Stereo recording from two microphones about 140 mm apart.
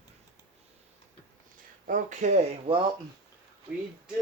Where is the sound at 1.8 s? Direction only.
65° right (ahead or behind).